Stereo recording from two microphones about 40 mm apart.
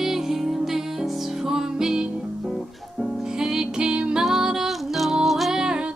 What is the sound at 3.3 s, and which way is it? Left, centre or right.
Music, centre.